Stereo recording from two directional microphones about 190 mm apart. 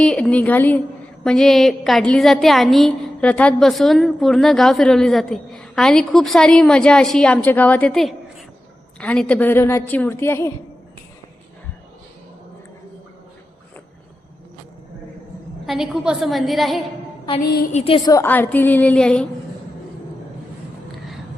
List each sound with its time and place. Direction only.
0.0 s a woman's voice: 5° left (ahead or behind)
15.6 s a woman's voice: centre (ahead or behind)
17.7 s a woman's voice: 35° left (ahead or behind)
18.1 s a woman's voice: 10° left (ahead or behind)